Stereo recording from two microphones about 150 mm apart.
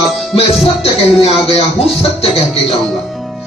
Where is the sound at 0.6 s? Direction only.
40° left (ahead or behind).